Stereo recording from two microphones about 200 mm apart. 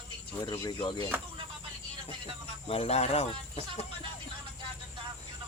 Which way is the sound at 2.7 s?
30° left (ahead or behind).